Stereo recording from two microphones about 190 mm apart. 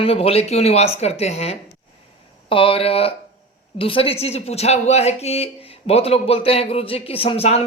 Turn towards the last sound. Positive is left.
turn(degrees=30)  # may be behind; listen again after turning